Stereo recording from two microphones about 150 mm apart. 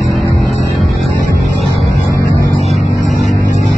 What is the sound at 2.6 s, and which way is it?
Music, 50° right (ahead or behind).